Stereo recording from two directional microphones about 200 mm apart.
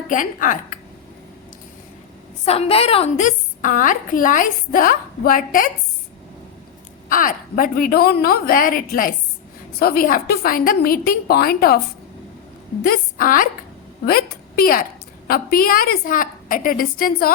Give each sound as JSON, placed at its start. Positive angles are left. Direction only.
{"t": 0.1, "sound": "a woman's voice", "side_deg": 40}
{"t": 2.4, "sound": "a woman's voice", "side_deg": 30}
{"t": 7.1, "sound": "a woman's voice", "side_deg": 40}
{"t": 12.8, "sound": "a woman's voice", "side_deg": 45}